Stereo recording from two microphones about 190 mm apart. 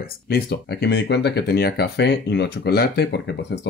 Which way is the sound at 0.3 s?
55° left (ahead or behind).